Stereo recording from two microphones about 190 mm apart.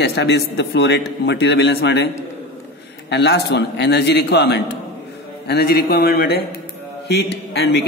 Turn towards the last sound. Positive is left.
turn(degrees=60)  # may be behind; listen again after turning